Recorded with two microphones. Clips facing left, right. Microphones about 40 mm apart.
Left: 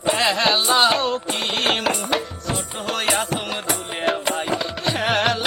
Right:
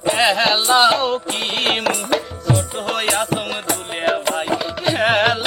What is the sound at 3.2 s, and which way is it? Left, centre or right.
Music, centre.